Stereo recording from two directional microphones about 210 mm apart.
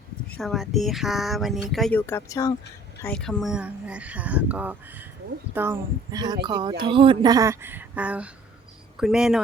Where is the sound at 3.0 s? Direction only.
5° left (ahead or behind).